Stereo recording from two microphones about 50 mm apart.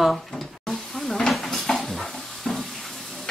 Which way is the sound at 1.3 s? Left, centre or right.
Centre.